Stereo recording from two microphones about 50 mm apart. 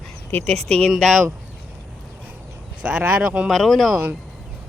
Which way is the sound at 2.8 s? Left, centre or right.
Right.